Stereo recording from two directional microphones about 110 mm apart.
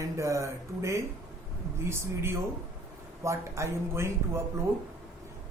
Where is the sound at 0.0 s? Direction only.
30° right (ahead or behind).